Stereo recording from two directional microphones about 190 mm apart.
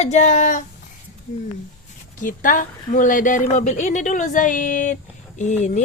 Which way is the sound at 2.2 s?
45° left (ahead or behind).